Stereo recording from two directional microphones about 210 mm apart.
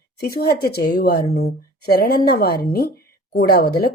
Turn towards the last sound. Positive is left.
turn(degrees=45)  # may be behind; listen again after turning